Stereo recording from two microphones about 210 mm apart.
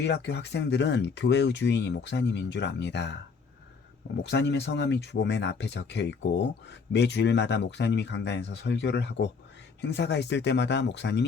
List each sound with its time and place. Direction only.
0.0 s speech: 55° left (ahead or behind)
4.2 s speech: 55° left (ahead or behind)